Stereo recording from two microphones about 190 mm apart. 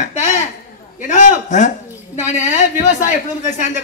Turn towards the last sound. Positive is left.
turn(degrees=40)  # may be behind; listen again after turning